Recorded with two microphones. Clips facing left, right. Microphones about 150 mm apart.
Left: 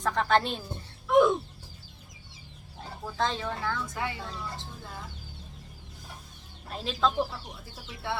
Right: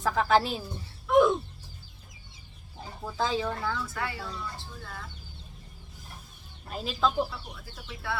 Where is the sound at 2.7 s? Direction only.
5° right (ahead or behind).